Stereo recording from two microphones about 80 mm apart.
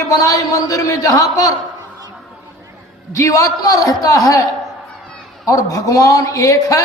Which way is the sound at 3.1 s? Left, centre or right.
Left.